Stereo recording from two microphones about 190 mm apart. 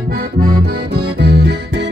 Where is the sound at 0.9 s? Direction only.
65° right (ahead or behind).